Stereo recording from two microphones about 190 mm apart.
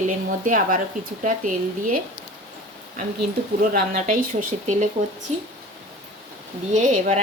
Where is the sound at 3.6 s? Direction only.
50° right (ahead or behind).